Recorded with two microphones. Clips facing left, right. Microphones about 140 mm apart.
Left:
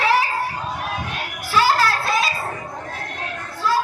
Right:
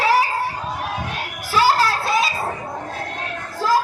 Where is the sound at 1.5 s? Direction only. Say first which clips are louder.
Right 1 dB; 40° right (ahead or behind).